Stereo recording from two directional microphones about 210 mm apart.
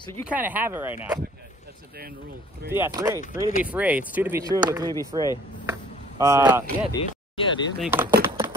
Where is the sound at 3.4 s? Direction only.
40° left (ahead or behind).